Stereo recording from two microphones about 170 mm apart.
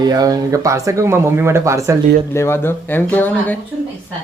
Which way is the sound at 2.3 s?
15° left (ahead or behind).